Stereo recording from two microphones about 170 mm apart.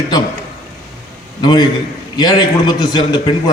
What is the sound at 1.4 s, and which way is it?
A man's voice, 25° left (ahead or behind).